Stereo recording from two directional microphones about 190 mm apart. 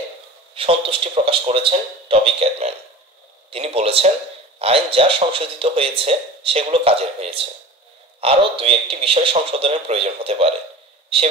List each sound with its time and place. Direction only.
0.6 s speech: 30° right (ahead or behind)